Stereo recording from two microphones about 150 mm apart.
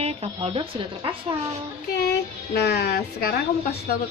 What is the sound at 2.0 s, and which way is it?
A child's voice, 90° left.